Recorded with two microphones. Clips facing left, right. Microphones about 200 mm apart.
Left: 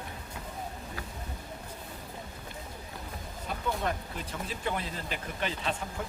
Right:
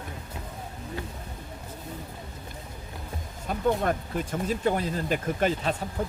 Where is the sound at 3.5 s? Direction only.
45° right (ahead or behind).